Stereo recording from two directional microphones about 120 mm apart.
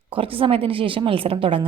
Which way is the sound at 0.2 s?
50° right (ahead or behind).